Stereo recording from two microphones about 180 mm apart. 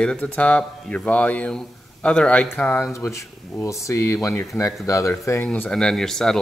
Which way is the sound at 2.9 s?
15° left (ahead or behind).